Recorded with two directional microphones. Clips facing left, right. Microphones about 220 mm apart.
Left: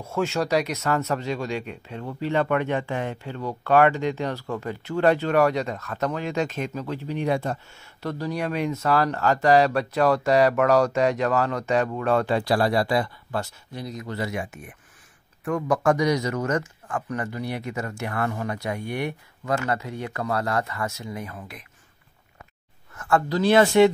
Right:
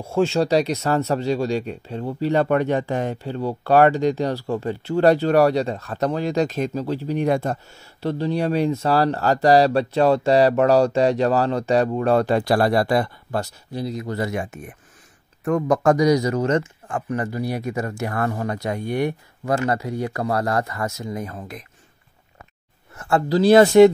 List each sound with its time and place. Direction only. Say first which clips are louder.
0.0 s speech: right 6 dB; 30° right (ahead or behind)
14.1 s speech: right 4 dB; 45° right (ahead or behind)
22.9 s speech: right 4 dB; 25° right (ahead or behind)